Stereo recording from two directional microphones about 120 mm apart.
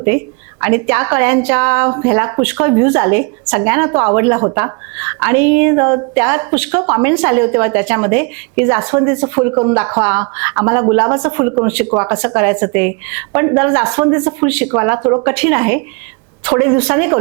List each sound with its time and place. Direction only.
0.6 s speech: 20° right (ahead or behind)